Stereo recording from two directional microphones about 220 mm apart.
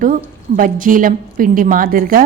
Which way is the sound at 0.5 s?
40° right (ahead or behind).